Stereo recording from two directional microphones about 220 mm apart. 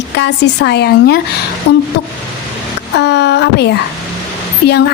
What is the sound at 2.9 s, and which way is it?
A woman's voice, 50° left (ahead or behind).